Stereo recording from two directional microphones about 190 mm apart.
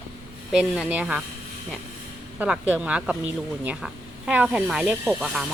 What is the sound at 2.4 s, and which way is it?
Speech, 5° right (ahead or behind).